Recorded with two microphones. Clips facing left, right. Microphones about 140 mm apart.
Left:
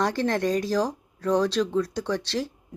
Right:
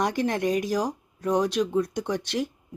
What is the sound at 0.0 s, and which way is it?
Speech, 15° right (ahead or behind).